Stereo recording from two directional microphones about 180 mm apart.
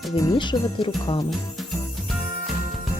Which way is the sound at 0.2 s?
20° left (ahead or behind).